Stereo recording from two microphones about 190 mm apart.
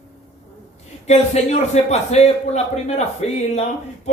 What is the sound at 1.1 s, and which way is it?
A woman's voice, 35° left (ahead or behind).